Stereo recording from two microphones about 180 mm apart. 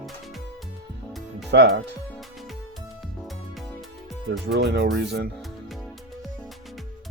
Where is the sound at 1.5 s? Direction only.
65° right (ahead or behind).